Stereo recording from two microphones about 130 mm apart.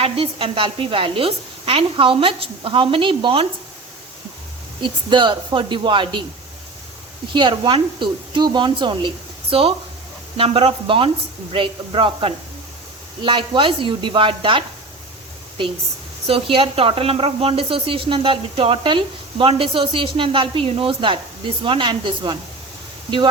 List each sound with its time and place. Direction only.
0.0 s a woman's voice: 45° right (ahead or behind)
4.8 s a woman's voice: 35° right (ahead or behind)
7.3 s a woman's voice: 35° right (ahead or behind)
16.2 s a woman's voice: 45° right (ahead or behind)